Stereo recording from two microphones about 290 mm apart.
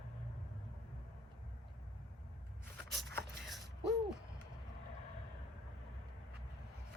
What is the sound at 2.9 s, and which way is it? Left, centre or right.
Vehicle, centre.